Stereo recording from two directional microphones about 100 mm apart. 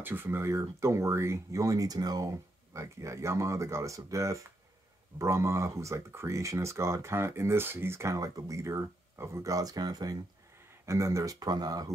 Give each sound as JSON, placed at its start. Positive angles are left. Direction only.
{"t": 0.0, "sound": "speech", "side_deg": -20}